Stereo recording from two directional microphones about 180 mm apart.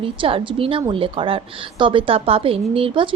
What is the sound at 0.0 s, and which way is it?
A woman's voice, 30° right (ahead or behind).